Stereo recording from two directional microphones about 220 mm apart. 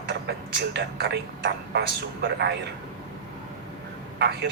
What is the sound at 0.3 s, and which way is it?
Speech, 50° right (ahead or behind).